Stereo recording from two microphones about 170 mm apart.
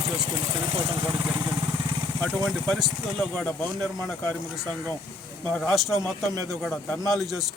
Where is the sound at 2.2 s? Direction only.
10° left (ahead or behind).